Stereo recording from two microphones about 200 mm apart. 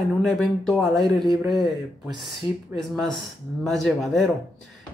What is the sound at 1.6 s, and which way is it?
Speech, 20° right (ahead or behind).